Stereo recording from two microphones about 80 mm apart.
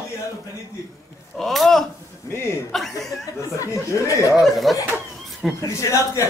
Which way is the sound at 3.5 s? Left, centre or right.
Left.